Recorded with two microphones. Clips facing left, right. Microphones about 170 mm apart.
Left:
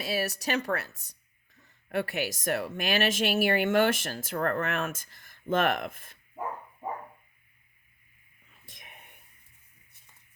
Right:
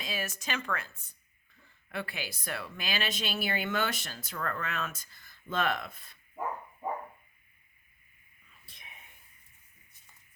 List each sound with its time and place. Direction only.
0.1 s speech: 40° left (ahead or behind)
8.8 s whispering: 55° left (ahead or behind)